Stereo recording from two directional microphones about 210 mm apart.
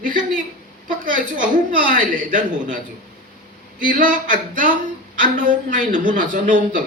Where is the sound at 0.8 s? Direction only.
40° right (ahead or behind).